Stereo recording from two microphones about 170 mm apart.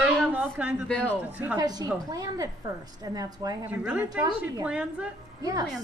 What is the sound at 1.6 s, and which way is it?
A woman's voice, 25° right (ahead or behind).